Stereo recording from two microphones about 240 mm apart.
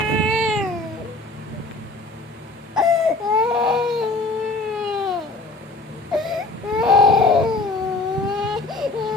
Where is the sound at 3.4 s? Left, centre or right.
Centre.